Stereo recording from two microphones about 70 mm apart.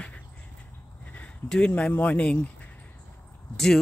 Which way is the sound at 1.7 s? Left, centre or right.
Left.